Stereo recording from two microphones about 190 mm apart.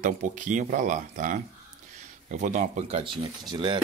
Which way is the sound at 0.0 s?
40° right (ahead or behind).